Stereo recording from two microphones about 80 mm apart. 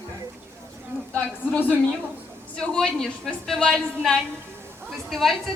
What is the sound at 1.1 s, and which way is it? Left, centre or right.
Speech, centre.